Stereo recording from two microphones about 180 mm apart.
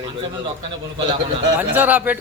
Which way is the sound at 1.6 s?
10° right (ahead or behind).